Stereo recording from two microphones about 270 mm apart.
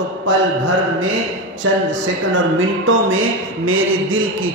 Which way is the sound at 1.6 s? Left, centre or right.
Right.